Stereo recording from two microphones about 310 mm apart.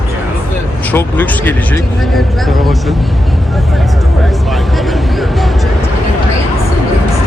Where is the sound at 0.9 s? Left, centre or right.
Centre.